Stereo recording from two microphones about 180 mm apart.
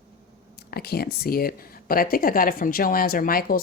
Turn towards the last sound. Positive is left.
turn(degrees=50)  # may be behind; listen again after turning